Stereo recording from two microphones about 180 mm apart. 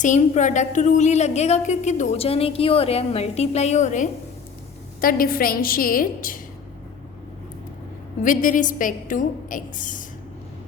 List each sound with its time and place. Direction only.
0.0 s a woman's voice: 45° left (ahead or behind)
8.2 s a woman's voice: 45° left (ahead or behind)